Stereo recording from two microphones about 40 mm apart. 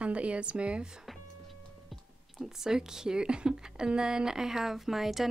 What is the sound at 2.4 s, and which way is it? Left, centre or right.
Speech, centre.